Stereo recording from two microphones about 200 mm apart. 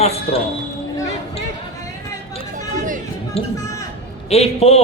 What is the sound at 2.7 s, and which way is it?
Run, 40° right (ahead or behind).